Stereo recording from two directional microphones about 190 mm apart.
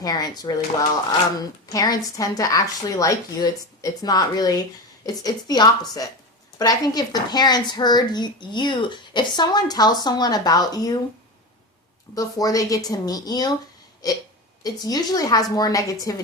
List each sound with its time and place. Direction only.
0.0 s speech: 20° left (ahead or behind)
12.1 s speech: 20° left (ahead or behind)